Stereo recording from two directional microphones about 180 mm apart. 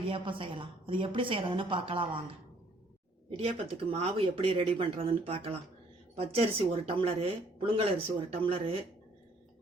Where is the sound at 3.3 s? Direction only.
35° right (ahead or behind).